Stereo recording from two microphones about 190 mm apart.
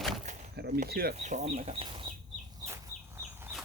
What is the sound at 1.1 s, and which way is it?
Speech, 35° right (ahead or behind).